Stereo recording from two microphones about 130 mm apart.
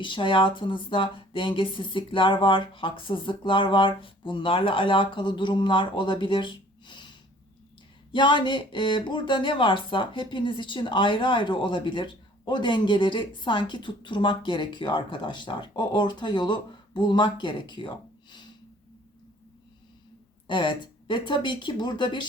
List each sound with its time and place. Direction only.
0.0 s speech: 40° left (ahead or behind)
20.5 s speech: 40° left (ahead or behind)